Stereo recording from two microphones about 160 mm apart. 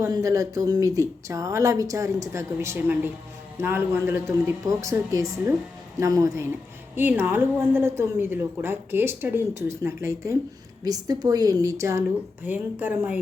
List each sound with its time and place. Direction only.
0.0 s a woman's voice: 20° right (ahead or behind)